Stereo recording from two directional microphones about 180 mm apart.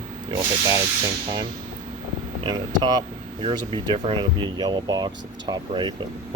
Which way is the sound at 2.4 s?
25° right (ahead or behind).